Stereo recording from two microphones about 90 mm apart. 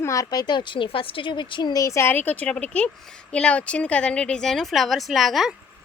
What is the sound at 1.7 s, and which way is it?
A child's voice, 35° left (ahead or behind).